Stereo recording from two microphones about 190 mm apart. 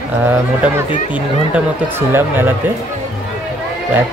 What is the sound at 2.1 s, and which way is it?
Speech, 10° right (ahead or behind).